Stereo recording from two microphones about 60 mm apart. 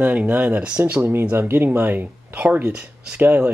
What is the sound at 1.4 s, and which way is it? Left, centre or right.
Speech, right.